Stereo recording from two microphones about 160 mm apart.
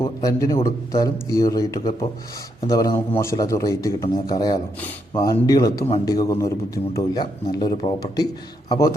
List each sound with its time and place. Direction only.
0.0 s a man's voice: 20° left (ahead or behind)